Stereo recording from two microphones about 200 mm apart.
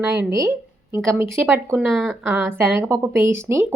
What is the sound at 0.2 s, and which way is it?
Speech, 15° right (ahead or behind).